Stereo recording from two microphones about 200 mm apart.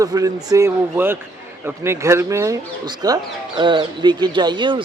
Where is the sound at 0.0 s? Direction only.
20° right (ahead or behind).